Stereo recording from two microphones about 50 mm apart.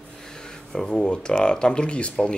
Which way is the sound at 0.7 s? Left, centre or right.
Centre.